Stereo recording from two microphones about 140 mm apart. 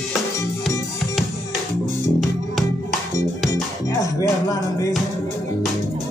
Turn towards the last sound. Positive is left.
turn(degrees=25)  # may be behind; listen again after turning